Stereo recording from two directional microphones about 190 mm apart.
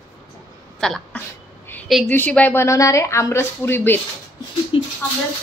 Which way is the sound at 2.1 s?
10° left (ahead or behind).